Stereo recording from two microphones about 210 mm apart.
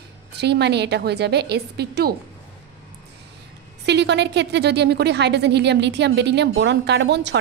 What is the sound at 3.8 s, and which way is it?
A woman's voice, 55° right (ahead or behind).